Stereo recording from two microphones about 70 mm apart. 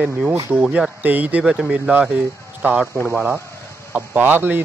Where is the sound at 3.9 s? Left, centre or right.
Right.